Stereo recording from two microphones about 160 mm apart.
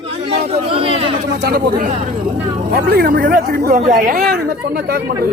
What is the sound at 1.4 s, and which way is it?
Speech, 70° right (ahead or behind).